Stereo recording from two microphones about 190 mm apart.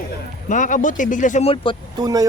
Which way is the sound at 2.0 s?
20° right (ahead or behind).